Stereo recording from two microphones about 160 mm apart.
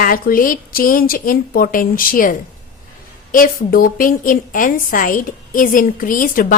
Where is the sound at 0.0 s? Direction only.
60° left (ahead or behind).